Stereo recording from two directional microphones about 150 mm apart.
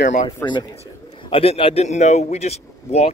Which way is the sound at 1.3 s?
40° left (ahead or behind).